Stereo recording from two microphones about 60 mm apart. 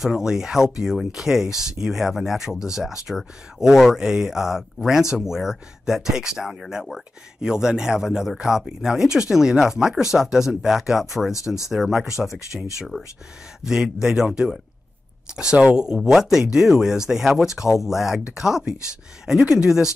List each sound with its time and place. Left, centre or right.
0.0 s speech: centre
11.3 s speech: left
11.7 s speech: centre
12.9 s speech: centre
13.7 s speech: centre